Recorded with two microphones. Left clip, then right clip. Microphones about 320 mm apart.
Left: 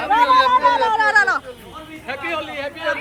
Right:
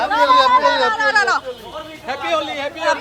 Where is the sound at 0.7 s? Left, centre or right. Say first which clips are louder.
Right 1 dB; right.